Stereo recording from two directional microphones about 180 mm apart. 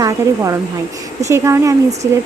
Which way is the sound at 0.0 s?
20° right (ahead or behind).